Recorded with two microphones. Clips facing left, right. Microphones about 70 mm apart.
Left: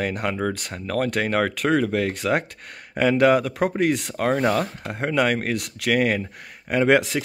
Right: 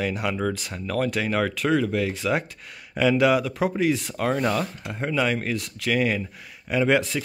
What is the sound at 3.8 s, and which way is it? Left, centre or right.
Speech, left.